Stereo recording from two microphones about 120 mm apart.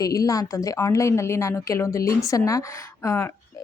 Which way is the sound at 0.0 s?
30° left (ahead or behind).